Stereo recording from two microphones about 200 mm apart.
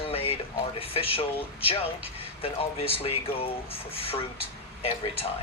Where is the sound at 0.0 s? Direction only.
30° left (ahead or behind).